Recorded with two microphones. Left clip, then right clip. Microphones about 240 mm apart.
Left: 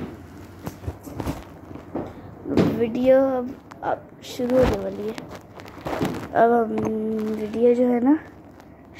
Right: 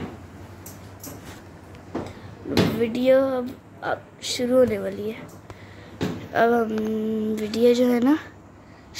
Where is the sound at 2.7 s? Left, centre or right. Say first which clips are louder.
Left 1 dB; centre.